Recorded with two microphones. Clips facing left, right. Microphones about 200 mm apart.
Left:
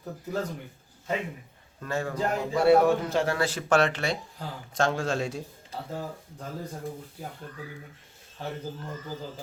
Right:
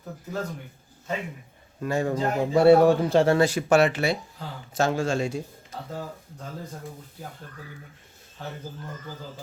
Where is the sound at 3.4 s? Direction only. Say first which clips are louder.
Right 4 dB; 10° right (ahead or behind).